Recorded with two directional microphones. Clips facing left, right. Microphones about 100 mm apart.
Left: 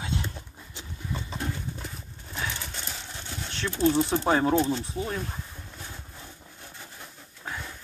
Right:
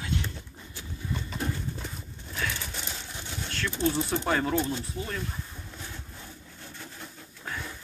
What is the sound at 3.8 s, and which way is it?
Speech, 15° left (ahead or behind).